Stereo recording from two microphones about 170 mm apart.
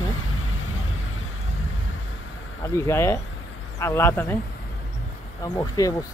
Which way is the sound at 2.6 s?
15° left (ahead or behind).